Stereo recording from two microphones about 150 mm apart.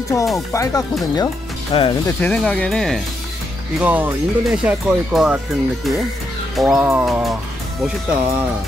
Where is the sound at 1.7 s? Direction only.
35° left (ahead or behind).